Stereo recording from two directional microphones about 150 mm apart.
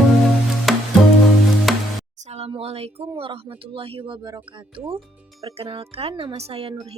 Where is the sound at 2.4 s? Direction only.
45° right (ahead or behind).